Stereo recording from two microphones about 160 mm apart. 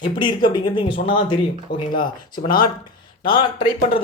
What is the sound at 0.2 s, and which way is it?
Speech, 30° left (ahead or behind).